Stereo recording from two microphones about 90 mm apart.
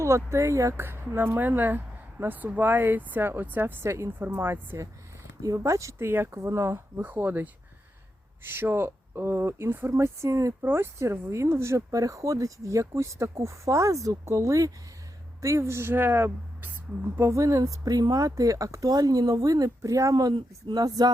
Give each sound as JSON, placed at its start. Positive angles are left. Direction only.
{"t": 0.0, "sound": "speech", "side_deg": -30}
{"t": 5.4, "sound": "speech", "side_deg": -35}
{"t": 10.6, "sound": "speech", "side_deg": -25}
{"t": 20.3, "sound": "speech", "side_deg": -55}